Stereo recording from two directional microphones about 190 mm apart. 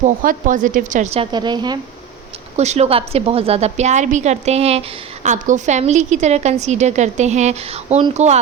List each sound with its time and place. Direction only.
0.0 s a woman's voice: 45° right (ahead or behind); by 1.8 s 20° right (ahead or behind)
2.6 s a woman's voice: 35° right (ahead or behind)